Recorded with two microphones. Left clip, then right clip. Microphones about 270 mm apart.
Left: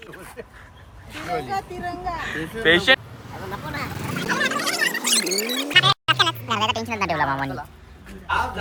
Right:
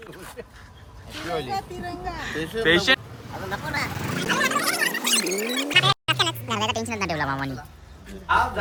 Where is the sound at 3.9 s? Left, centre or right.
Centre.